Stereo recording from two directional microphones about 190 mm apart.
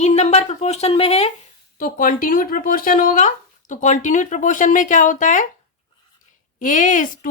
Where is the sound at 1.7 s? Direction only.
45° left (ahead or behind).